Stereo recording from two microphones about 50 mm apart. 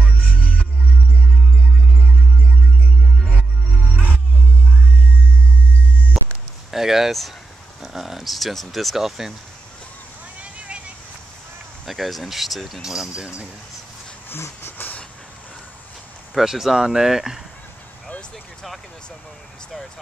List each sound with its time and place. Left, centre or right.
0.0 s music: left
3.9 s music: left
6.2 s a sound: centre
6.7 s speech: centre
10.4 s vehicle: right
11.8 s speech: centre
14.6 s train: left
16.3 s speech: centre